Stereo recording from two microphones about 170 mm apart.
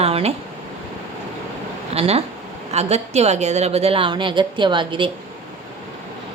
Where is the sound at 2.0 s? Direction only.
35° right (ahead or behind).